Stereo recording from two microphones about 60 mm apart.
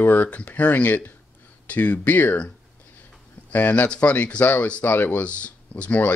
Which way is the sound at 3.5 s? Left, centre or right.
Left.